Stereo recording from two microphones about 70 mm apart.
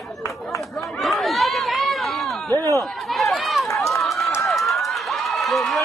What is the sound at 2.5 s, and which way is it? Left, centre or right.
Chatter, right.